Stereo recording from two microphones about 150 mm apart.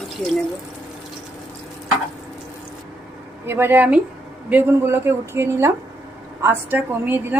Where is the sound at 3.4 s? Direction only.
15° right (ahead or behind).